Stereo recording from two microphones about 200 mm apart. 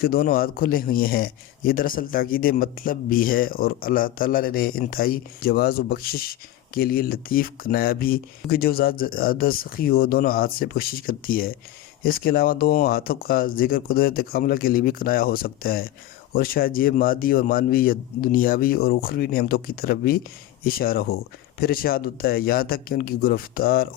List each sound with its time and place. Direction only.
0.0 s a man's voice: 50° left (ahead or behind)